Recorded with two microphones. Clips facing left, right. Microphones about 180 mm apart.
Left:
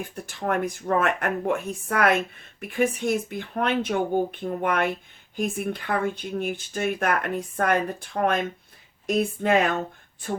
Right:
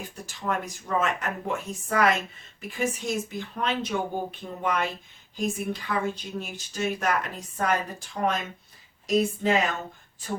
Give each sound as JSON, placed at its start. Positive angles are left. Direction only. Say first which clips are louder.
{"t": 0.2, "sound": "speech", "louder": "left 5 dB", "side_deg": 60}